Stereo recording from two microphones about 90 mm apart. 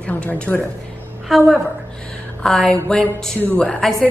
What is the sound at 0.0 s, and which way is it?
Speech, 15° left (ahead or behind).